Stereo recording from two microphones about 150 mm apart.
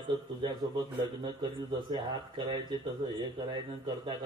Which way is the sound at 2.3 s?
35° right (ahead or behind).